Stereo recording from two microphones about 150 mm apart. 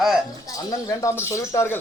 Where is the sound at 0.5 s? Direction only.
20° left (ahead or behind).